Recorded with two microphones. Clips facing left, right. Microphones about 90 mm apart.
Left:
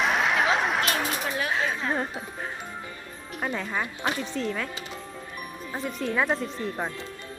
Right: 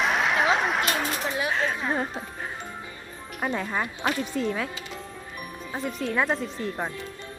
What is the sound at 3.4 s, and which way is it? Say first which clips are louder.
A woman's voice: right 2 dB; 10° right (ahead or behind).